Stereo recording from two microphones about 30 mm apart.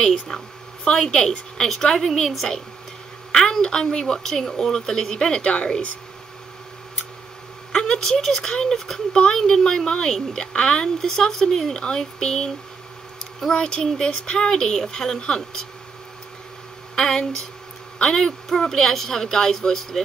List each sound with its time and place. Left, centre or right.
0.0 s a woman's voice: centre
5.5 s speech: left
7.7 s a woman's voice: centre
9.1 s a woman's voice: left
11.0 s a woman's voice: centre
13.5 s a woman's voice: left
16.9 s speech: left
18.7 s a woman's voice: centre